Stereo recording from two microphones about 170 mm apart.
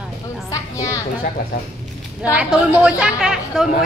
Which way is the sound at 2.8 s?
5° right (ahead or behind).